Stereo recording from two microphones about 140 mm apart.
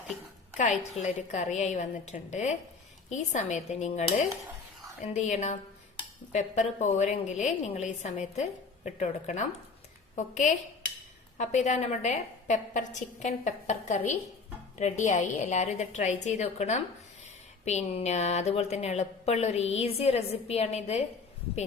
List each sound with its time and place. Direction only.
0.5 s a woman's voice: 60° left (ahead or behind)
5.1 s a woman's voice: 55° left (ahead or behind)
11.3 s a woman's voice: 55° left (ahead or behind)